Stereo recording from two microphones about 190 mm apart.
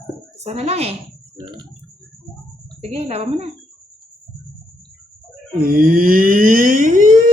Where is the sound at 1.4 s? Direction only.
25° right (ahead or behind).